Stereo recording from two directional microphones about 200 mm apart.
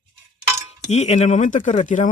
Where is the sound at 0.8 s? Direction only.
35° left (ahead or behind).